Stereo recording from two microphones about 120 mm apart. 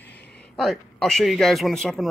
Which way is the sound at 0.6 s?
5° left (ahead or behind).